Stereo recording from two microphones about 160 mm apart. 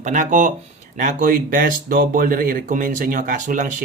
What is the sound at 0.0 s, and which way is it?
Speech, 50° right (ahead or behind).